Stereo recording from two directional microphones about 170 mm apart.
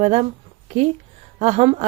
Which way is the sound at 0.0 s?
40° right (ahead or behind).